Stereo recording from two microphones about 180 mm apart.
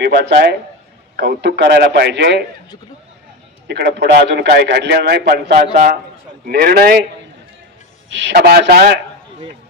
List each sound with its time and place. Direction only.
0.0 s a man's voice: 65° right (ahead or behind)
3.6 s a man's voice: 70° right (ahead or behind)
8.1 s a man's voice: 80° right; by 9.0 s 60° right (ahead or behind)